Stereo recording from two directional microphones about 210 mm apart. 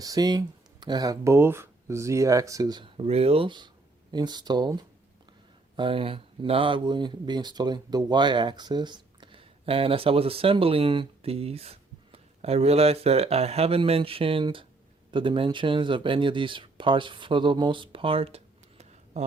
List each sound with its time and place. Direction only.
0.0 s speech: 15° right (ahead or behind)
5.7 s speech: 25° right (ahead or behind)